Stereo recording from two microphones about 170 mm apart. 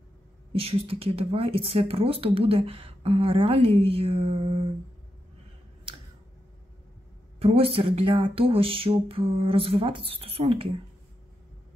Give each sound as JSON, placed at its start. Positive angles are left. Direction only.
{"t": 0.5, "sound": "speech", "side_deg": -35}
{"t": 7.3, "sound": "speech", "side_deg": -35}